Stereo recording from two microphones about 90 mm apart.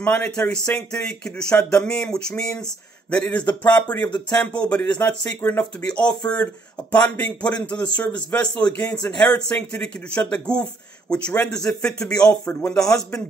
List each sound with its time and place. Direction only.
0.0 s speech: 15° left (ahead or behind)